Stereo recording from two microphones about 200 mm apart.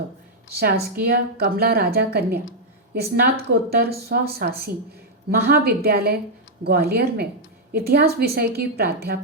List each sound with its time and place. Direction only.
0.5 s a woman's voice: 55° right (ahead or behind)